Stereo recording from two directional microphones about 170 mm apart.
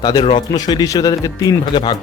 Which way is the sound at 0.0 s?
25° left (ahead or behind).